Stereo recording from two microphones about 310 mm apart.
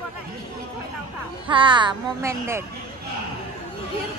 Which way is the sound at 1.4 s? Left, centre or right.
Centre.